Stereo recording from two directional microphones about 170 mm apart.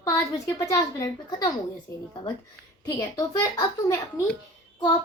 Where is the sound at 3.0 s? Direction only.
20° left (ahead or behind).